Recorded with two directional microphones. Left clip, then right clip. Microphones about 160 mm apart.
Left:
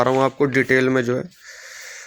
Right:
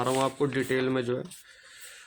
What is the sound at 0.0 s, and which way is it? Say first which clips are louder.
Speech: left 9 dB; 40° left (ahead or behind).